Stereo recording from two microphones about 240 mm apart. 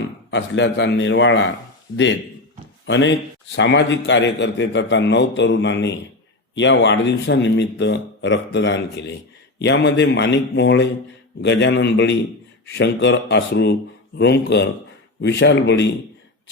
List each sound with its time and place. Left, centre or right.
0.3 s a man's voice: left
2.8 s a man's voice: left